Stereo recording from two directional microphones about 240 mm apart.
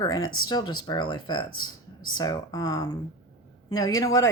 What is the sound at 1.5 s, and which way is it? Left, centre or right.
Speech, left.